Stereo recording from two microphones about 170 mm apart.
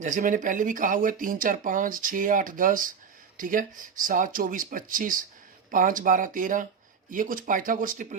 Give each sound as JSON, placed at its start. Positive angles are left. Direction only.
{"t": 0.0, "sound": "speech", "side_deg": -50}